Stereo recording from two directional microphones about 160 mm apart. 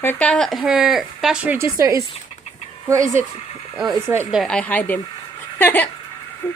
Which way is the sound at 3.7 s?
Centre (ahead or behind).